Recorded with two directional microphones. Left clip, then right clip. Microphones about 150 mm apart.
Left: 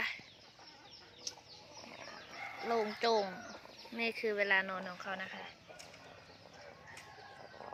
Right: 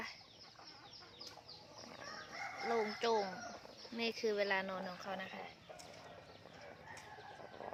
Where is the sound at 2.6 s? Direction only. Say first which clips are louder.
Left 3 dB; 5° left (ahead or behind).